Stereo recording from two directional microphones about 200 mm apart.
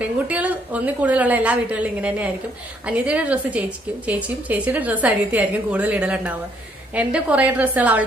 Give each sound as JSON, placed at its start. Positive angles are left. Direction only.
{"t": 0.0, "sound": "a woman's voice", "side_deg": -5}